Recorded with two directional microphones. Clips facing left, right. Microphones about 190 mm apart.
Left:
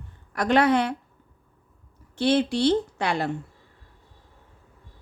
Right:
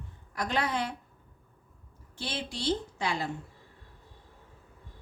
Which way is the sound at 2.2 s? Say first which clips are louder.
Left 16 dB; 65° left (ahead or behind).